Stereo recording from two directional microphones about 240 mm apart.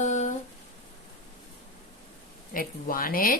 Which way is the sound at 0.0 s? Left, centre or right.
Left.